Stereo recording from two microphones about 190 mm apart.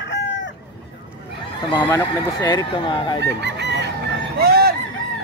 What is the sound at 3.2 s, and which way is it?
Fowl, 65° right (ahead or behind).